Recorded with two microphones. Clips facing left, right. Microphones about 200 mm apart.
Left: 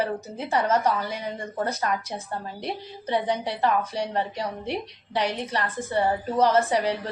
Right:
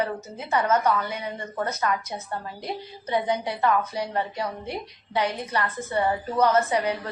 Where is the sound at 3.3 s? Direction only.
30° left (ahead or behind).